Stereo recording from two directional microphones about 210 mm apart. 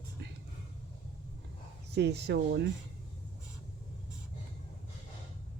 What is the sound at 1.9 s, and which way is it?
Speech, 55° right (ahead or behind).